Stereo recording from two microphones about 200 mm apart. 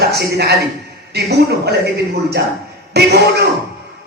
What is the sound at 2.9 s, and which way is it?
Speech, 55° right (ahead or behind).